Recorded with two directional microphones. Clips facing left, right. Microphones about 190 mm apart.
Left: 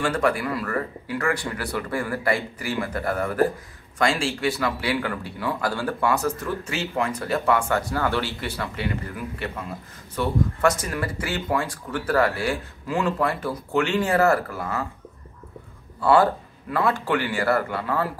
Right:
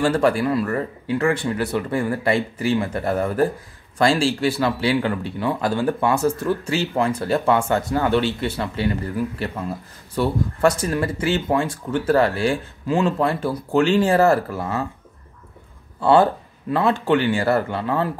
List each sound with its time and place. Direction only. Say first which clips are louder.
0.0 s speech: right 5 dB; 30° right (ahead or behind)
16.0 s speech: right 3 dB; 25° right (ahead or behind)